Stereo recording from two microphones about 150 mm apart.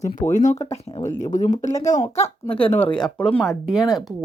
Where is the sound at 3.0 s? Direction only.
5° left (ahead or behind).